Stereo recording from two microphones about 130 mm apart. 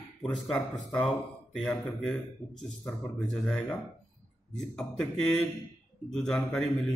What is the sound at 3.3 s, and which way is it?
Speech, centre (ahead or behind).